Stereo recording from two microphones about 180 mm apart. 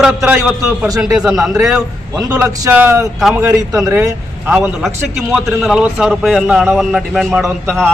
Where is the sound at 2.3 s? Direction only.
20° right (ahead or behind).